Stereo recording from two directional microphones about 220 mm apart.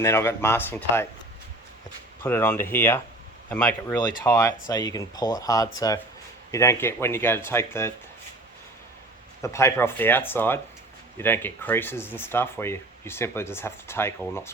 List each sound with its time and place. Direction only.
0.0 s speech: 10° left (ahead or behind)
2.2 s speech: 10° left (ahead or behind)
9.4 s speech: 15° left (ahead or behind)